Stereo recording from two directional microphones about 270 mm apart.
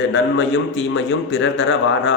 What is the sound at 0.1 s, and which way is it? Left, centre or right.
A man's voice, left.